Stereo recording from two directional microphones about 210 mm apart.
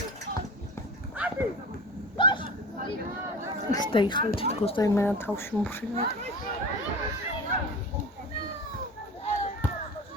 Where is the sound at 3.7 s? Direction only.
20° left (ahead or behind).